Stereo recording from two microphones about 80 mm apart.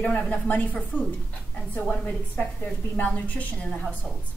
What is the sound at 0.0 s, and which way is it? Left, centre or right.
A woman's voice, centre.